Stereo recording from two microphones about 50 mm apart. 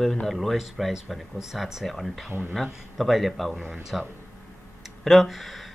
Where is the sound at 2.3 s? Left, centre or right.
Right.